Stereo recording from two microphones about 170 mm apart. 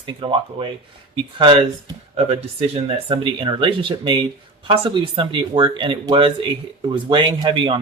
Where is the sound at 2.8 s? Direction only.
30° right (ahead or behind).